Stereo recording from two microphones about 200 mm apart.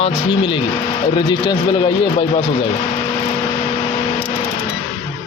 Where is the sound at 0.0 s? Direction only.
25° left (ahead or behind).